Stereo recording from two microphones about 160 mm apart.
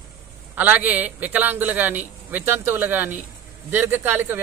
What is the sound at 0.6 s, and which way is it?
A man's voice, 10° right (ahead or behind).